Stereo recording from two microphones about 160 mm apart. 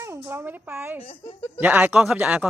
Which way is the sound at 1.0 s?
35° left (ahead or behind).